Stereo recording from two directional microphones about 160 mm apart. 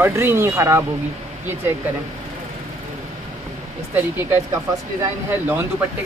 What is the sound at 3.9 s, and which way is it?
Speech, 15° right (ahead or behind).